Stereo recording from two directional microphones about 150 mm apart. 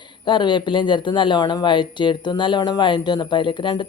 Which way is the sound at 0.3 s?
30° left (ahead or behind).